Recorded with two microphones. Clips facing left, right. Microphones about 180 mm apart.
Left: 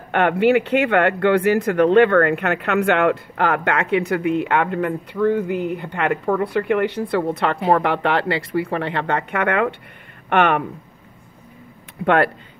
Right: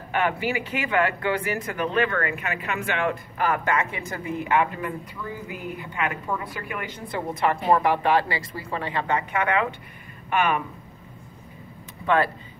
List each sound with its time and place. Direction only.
0.1 s speech: 65° left (ahead or behind)
12.0 s speech: 65° left (ahead or behind)